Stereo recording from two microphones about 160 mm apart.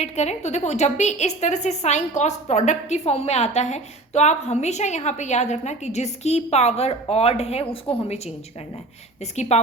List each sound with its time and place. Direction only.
0.0 s a woman's voice: 45° left (ahead or behind)